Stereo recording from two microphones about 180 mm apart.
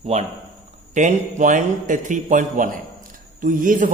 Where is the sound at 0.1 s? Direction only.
35° right (ahead or behind).